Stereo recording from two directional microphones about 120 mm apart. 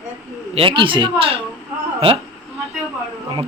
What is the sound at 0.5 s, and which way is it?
Speech, 45° right (ahead or behind).